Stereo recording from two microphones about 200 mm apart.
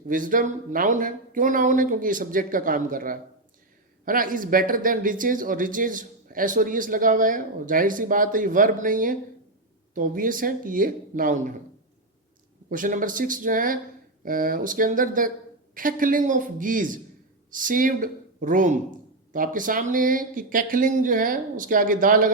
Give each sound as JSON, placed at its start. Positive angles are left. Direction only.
{"t": 0.1, "sound": "speech", "side_deg": -40}
{"t": 12.6, "sound": "a man's voice", "side_deg": -40}